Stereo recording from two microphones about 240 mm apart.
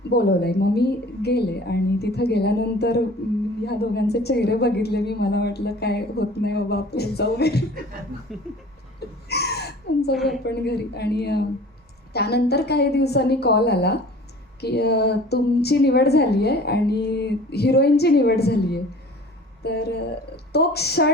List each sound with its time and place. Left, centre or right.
0.1 s a woman's voice: left
8.3 s speech: centre
9.3 s a sound: left
10.4 s a woman's voice: left